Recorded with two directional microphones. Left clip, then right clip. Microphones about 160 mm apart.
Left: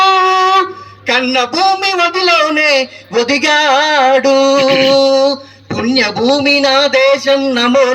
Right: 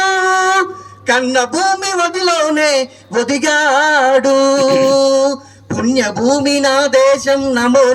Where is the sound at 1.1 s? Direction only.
40° right (ahead or behind).